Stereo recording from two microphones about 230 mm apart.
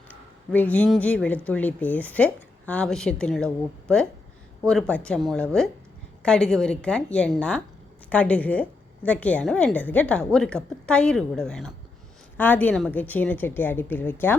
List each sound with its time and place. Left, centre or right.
0.5 s a woman's voice: centre